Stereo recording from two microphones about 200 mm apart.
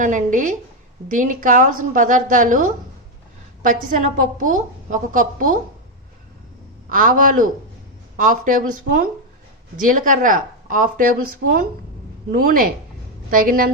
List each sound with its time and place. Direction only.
0.0 s a woman's voice: 40° right (ahead or behind)
6.9 s a woman's voice: 40° right (ahead or behind)